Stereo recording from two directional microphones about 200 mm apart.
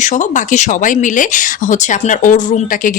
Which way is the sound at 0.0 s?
40° left (ahead or behind).